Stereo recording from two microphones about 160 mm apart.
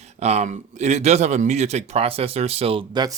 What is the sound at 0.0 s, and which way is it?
A man's voice, 45° right (ahead or behind).